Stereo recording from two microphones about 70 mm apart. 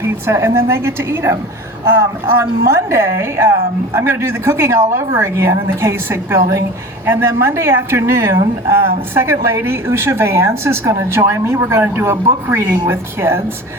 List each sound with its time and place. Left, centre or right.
0.0 s a woman's voice: right
2.4 s a woman's voice: right